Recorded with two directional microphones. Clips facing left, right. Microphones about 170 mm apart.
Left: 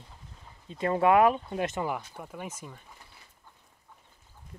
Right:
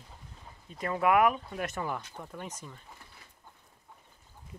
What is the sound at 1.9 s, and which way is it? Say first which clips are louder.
Speech: left 3 dB; 10° left (ahead or behind).